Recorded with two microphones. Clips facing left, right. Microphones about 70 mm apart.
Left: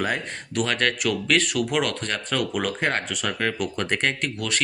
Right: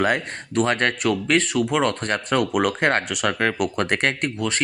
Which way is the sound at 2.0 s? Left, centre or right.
Right.